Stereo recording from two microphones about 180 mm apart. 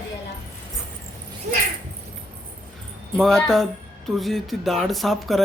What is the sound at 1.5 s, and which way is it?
Speech, 45° right (ahead or behind).